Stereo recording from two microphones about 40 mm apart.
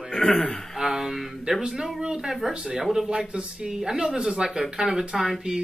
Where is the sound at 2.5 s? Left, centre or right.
Right.